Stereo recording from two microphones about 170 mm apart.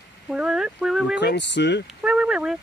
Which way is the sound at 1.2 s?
90° left.